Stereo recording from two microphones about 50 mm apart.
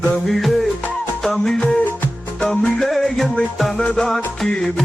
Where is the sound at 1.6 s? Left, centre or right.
Left.